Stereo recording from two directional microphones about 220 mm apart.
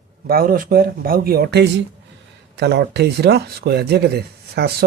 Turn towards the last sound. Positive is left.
turn(degrees=-45)  # may be behind; listen again after turning